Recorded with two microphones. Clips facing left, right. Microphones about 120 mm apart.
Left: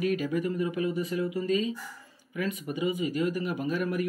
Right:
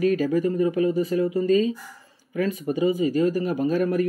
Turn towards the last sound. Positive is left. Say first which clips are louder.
# right 7 dB
turn(degrees=-35)  # may be behind; listen again after turning